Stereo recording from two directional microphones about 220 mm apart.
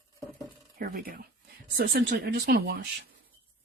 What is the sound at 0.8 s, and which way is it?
Speech, 45° right (ahead or behind).